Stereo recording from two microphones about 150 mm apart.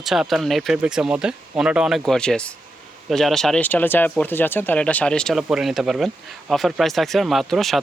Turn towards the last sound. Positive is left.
turn(degrees=0)  # may be behind; listen again after turning